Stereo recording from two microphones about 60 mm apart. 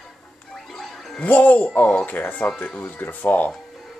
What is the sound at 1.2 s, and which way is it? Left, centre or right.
Speech, left.